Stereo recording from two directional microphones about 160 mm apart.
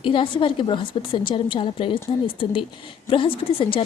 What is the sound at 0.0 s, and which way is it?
A woman's voice, 30° left (ahead or behind).